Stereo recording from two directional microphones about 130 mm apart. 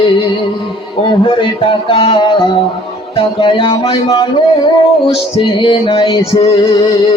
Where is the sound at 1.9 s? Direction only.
45° left (ahead or behind).